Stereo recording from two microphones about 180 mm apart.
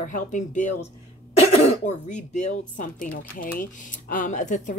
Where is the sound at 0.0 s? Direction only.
45° left (ahead or behind).